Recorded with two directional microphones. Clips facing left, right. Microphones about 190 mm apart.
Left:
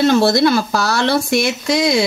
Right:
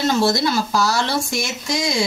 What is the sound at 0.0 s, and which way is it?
Speech, 65° left (ahead or behind).